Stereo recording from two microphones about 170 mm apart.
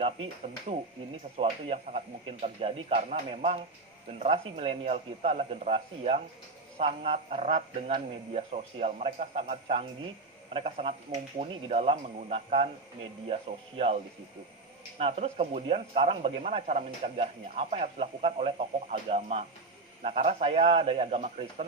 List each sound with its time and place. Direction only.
0.0 s speech: 35° right (ahead or behind)